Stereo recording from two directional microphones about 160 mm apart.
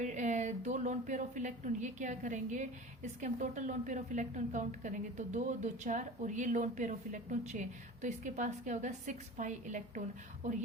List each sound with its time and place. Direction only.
0.0 s speech: 50° right (ahead or behind)